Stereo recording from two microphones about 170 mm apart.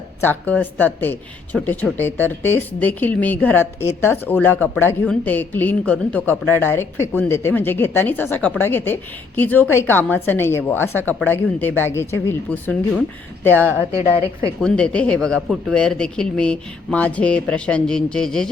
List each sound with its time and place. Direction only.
0.2 s speech: 10° left (ahead or behind)
13.9 s a woman's voice: 35° left (ahead or behind)
14.6 s speech: 5° left (ahead or behind)